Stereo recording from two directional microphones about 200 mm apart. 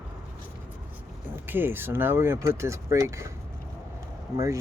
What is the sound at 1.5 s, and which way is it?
Speech, 10° right (ahead or behind).